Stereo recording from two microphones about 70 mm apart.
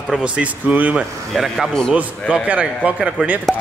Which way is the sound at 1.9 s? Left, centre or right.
Centre.